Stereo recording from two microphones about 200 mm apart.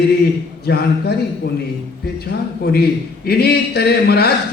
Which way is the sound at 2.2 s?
50° left (ahead or behind).